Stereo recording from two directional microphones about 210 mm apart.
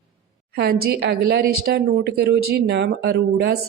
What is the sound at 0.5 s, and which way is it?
A woman's voice, 50° right (ahead or behind).